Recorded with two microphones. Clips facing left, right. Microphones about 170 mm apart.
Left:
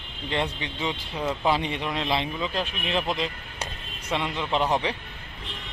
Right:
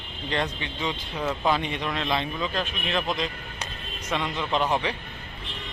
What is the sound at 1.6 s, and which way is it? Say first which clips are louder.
Speech: even; 25° left (ahead or behind).